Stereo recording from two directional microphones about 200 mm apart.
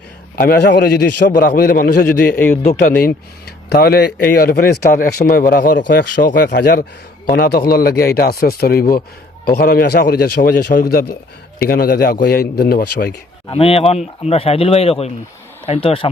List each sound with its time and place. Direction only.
0.3 s a man's voice: 55° left (ahead or behind)
5.9 s chopping: 50° left (ahead or behind)
7.3 s a man's voice: 50° left (ahead or behind)
13.5 s speech: 30° left (ahead or behind)